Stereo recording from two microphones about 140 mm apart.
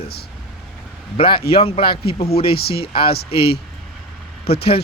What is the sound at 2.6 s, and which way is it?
Speech, 90° left.